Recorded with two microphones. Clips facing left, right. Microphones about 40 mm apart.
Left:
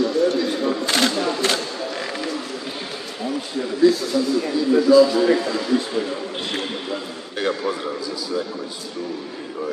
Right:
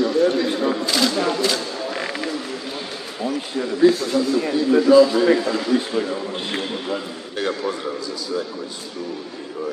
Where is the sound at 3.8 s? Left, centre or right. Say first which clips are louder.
Right 1 dB; right.